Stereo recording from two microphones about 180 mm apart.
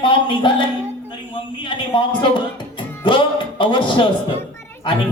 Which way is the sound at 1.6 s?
25° left (ahead or behind).